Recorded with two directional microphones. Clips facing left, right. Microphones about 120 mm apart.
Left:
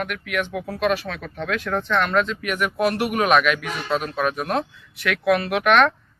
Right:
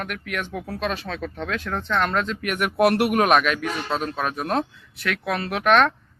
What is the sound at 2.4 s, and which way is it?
Speech, 60° right (ahead or behind).